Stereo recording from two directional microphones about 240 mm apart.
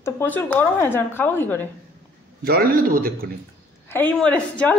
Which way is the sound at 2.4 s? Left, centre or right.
Right.